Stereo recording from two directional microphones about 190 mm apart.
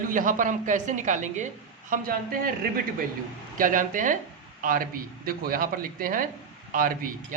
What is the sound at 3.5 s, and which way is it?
A man's voice, 45° right (ahead or behind).